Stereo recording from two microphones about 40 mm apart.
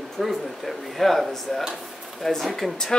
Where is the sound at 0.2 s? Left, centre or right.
Centre.